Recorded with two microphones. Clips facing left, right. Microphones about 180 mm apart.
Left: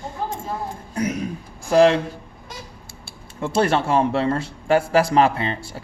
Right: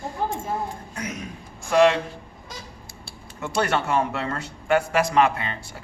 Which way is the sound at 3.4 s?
30° left (ahead or behind).